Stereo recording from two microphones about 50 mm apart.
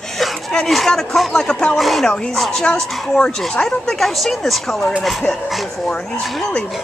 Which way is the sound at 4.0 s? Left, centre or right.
Centre.